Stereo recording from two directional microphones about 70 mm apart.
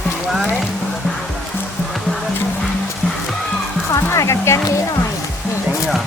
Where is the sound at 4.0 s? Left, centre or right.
Left.